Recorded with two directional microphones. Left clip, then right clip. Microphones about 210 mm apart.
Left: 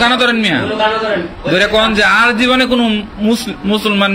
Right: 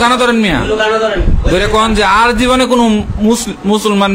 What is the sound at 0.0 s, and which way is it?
A man's voice, 35° right (ahead or behind).